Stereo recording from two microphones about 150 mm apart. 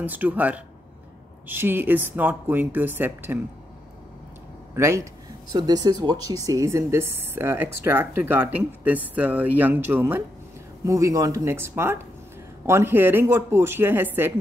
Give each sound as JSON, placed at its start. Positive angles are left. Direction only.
{"t": 0.0, "sound": "speech", "side_deg": -10}
{"t": 4.7, "sound": "speech", "side_deg": -20}